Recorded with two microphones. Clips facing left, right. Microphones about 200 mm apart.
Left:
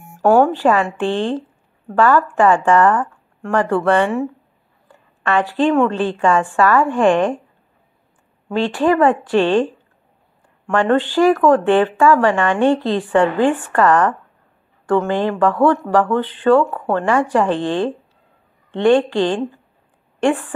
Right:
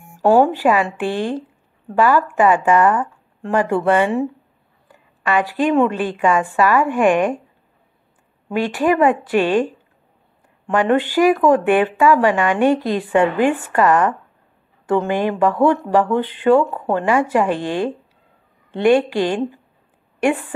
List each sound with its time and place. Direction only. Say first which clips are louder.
0.2 s a woman's voice: left 1 dB; 15° right (ahead or behind)
8.5 s speech: left 1 dB; 15° right (ahead or behind)
10.7 s a woman's voice: left 1 dB; 15° right (ahead or behind)